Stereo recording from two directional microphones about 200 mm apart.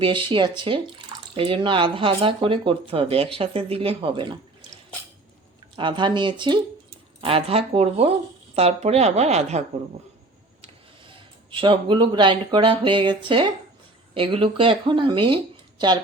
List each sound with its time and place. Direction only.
0.0 s speech: 25° right (ahead or behind)
5.7 s a woman's voice: 25° right (ahead or behind)
11.1 s speech: 25° right (ahead or behind)